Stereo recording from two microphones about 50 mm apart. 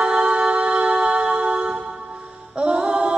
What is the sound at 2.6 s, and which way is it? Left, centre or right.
A capella, right.